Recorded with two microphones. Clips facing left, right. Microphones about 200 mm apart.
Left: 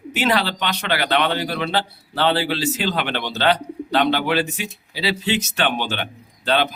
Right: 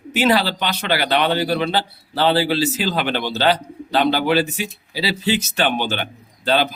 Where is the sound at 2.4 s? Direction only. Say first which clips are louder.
Right 4 dB; 35° right (ahead or behind).